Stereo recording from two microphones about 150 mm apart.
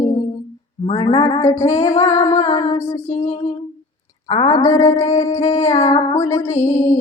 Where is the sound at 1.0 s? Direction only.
40° left (ahead or behind).